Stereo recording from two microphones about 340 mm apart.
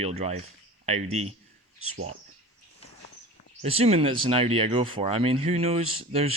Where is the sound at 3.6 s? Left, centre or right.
Centre.